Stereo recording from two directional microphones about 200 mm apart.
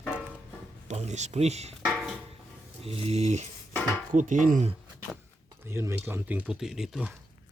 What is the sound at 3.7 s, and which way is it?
Dishes, 10° left (ahead or behind).